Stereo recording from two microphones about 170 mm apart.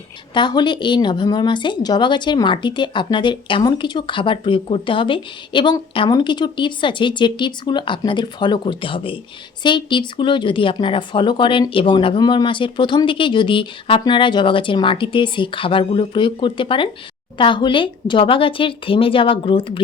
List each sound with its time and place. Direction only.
0.3 s speech: 25° left (ahead or behind)